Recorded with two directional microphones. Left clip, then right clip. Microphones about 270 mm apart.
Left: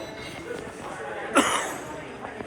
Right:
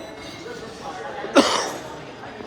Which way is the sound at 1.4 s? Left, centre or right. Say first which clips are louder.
Right 5 dB; right.